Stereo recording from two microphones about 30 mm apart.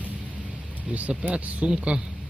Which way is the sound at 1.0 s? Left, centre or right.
Right.